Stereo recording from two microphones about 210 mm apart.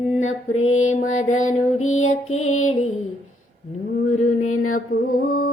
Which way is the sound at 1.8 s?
75° left (ahead or behind).